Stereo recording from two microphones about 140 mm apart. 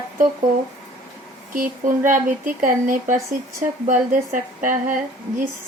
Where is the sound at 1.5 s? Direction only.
75° right (ahead or behind).